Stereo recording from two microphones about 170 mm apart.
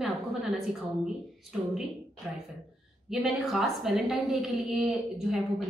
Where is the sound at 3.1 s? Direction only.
Centre (ahead or behind).